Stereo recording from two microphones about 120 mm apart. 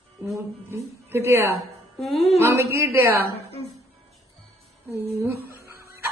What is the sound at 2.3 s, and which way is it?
Speech, 20° right (ahead or behind).